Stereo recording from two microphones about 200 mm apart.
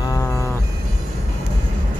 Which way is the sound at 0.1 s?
15° left (ahead or behind).